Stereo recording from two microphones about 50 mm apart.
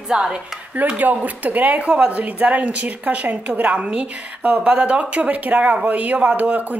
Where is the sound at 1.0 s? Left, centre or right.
Right.